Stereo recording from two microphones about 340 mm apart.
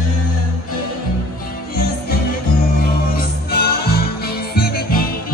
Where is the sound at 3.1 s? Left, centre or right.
Left.